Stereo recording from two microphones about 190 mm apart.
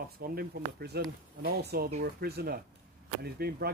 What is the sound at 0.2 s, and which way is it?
Speech, 55° right (ahead or behind).